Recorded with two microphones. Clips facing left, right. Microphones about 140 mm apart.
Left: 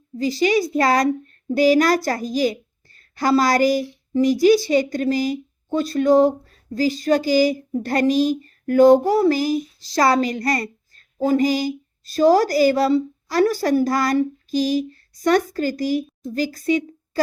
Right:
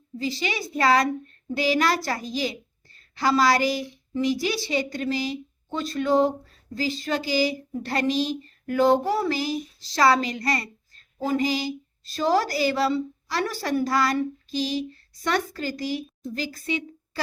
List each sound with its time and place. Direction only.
0.2 s a woman's voice: 40° left (ahead or behind)